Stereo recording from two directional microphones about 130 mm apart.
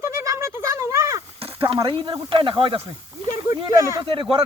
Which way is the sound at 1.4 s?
45° right (ahead or behind).